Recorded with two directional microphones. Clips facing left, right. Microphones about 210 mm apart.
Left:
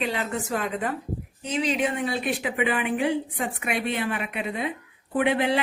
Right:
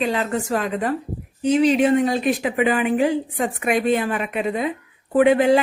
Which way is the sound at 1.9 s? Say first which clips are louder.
Right 9 dB; 40° right (ahead or behind).